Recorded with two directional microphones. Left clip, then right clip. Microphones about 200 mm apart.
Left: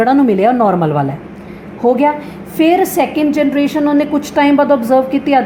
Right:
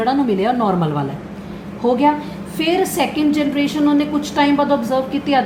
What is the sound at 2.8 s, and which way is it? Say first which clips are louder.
A woman's voice: left 4 dB; 50° left (ahead or behind).